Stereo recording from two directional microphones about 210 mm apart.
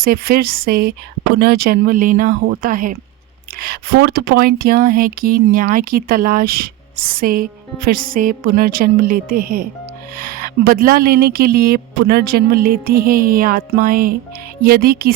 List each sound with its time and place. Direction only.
0.0 s speech: 45° right (ahead or behind)